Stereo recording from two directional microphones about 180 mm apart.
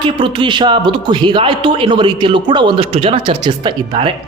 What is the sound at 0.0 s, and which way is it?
A man's voice, 30° right (ahead or behind).